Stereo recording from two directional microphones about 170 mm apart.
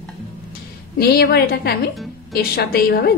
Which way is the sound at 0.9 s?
70° left (ahead or behind).